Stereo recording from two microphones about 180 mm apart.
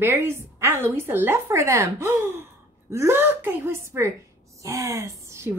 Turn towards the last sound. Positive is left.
turn(degrees=-15)  # may be behind; listen again after turning